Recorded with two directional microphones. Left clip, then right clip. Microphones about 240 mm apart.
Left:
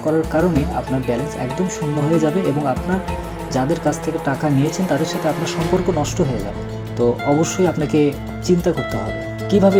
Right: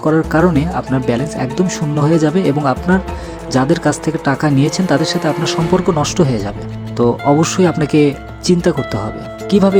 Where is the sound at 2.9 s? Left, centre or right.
Right.